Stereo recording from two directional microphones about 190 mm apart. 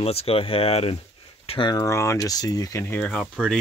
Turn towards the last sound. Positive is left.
turn(degrees=5)  # may be behind; listen again after turning